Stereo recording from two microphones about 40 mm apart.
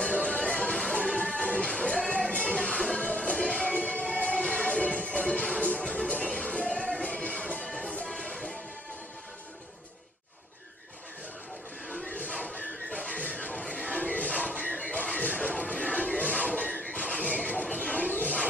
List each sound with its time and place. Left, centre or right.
0.0 s music: centre
2.2 s music: left
6.4 s music: centre
8.1 s music: centre
12.5 s music: left
14.6 s a sound: left
15.4 s music: centre
17.1 s a sound: left